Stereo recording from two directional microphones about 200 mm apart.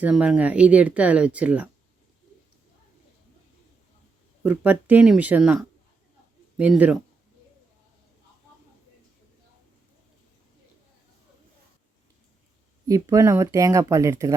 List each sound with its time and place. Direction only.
0.0 s speech: 5° right (ahead or behind)
4.4 s speech: 10° right (ahead or behind)
12.9 s speech: 15° right (ahead or behind)